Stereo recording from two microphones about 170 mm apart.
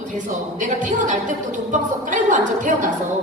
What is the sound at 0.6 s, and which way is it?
A woman's voice, 50° right (ahead or behind).